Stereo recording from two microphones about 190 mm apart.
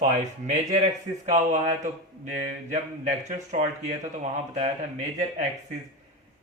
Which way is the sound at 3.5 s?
35° right (ahead or behind).